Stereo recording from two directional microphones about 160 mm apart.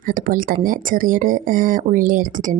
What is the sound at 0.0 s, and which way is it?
Speech, 60° right (ahead or behind).